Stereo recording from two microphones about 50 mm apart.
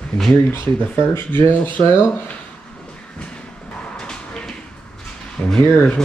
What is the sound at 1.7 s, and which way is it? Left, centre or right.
Speech, left.